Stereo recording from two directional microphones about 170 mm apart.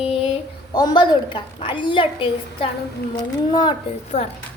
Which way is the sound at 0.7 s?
25° left (ahead or behind).